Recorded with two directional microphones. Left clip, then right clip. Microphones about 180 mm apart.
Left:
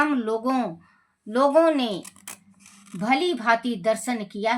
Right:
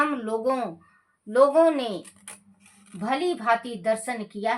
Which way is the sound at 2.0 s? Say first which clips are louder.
Left 4 dB; 50° left (ahead or behind).